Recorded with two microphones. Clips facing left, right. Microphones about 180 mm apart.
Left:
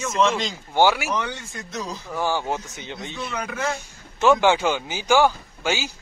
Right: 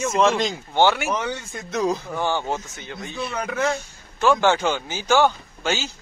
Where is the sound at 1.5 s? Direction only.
55° right (ahead or behind).